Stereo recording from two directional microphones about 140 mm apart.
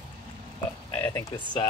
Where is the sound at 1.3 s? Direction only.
35° left (ahead or behind).